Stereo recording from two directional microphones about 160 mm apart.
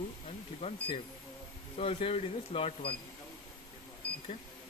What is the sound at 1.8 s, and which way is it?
Speech, 35° left (ahead or behind).